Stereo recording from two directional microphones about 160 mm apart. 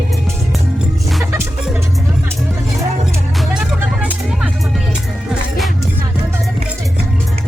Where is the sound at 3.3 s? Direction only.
Centre (ahead or behind).